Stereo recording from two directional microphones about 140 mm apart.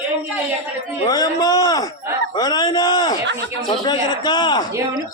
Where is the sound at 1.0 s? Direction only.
30° left (ahead or behind).